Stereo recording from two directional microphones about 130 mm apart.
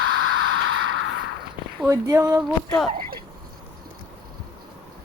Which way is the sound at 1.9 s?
25° right (ahead or behind).